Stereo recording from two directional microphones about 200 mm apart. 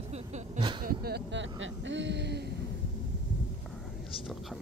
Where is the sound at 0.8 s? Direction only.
50° right (ahead or behind).